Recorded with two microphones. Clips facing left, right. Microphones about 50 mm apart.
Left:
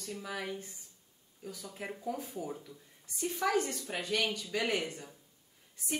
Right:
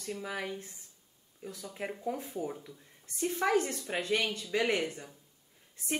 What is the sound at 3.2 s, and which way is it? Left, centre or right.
Speech, right.